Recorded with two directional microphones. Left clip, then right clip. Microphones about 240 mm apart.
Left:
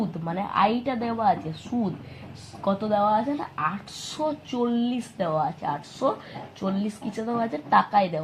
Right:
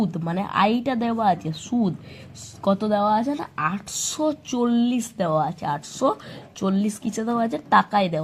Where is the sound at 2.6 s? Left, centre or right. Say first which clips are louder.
Right 2 dB; right.